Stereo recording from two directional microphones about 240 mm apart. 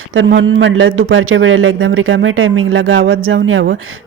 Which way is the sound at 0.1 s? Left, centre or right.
Right.